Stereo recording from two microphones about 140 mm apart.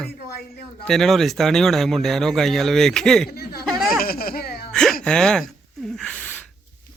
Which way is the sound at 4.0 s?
90° left.